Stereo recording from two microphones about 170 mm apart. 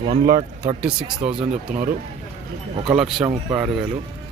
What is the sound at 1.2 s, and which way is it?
Speech, 40° right (ahead or behind).